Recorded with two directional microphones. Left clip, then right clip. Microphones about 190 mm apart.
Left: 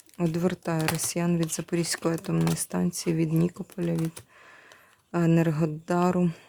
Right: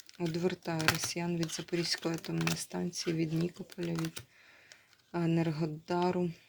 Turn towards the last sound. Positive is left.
turn(degrees=40)  # may be behind; listen again after turning